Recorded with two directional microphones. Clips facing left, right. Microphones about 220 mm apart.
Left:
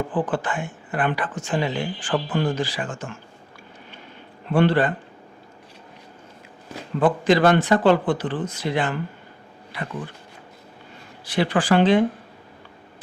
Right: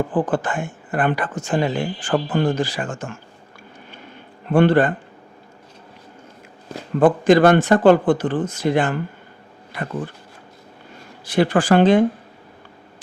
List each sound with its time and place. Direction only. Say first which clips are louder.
0.1 s speech: right 3 dB; 45° right (ahead or behind)
4.5 s speech: right 4 dB; 50° right (ahead or behind)
7.0 s speech: right 5 dB; 50° right (ahead or behind)
11.3 s speech: right 4 dB; 45° right (ahead or behind)